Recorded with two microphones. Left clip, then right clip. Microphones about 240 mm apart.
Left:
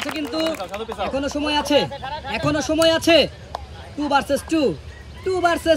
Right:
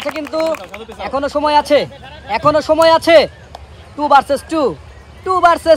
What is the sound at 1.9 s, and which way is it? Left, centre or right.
Speech, centre.